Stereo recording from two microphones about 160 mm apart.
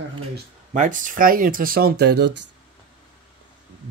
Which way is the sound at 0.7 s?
55° right (ahead or behind).